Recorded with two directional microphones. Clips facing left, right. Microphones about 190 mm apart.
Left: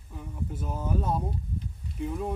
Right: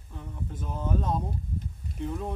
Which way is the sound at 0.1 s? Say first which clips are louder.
Left 2 dB; 10° left (ahead or behind).